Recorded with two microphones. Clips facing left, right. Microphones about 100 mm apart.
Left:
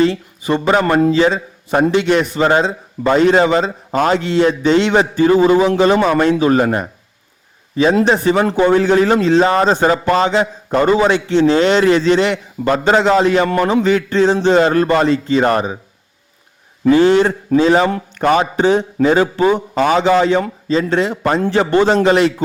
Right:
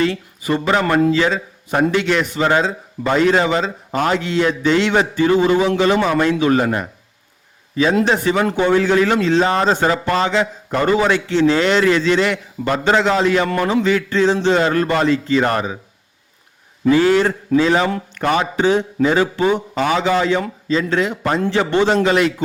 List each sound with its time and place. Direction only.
0.0 s a man's voice: 30° left (ahead or behind)
8.2 s a man's voice: 30° left (ahead or behind)
9.6 s a man's voice: 25° left (ahead or behind)
16.9 s a man's voice: 25° left (ahead or behind)
21.4 s a man's voice: 40° left (ahead or behind)